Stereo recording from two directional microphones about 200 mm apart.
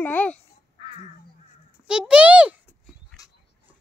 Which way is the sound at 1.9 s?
5° right (ahead or behind).